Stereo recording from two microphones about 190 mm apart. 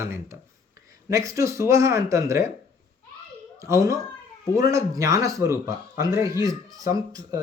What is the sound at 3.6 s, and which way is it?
Speech, 15° right (ahead or behind).